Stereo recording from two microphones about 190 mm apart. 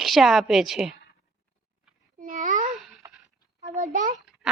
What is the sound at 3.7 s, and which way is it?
Speech, 40° right (ahead or behind).